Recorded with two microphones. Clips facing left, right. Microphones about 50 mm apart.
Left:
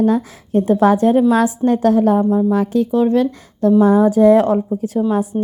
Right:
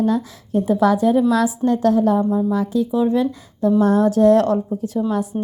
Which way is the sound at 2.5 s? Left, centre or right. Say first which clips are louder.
Left 3 dB; left.